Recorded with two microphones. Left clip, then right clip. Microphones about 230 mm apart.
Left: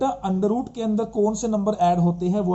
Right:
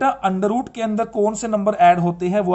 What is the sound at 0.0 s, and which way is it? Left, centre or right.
Speech, right.